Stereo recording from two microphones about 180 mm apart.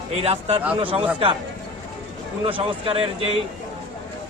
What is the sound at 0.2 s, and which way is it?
Speech, 35° right (ahead or behind).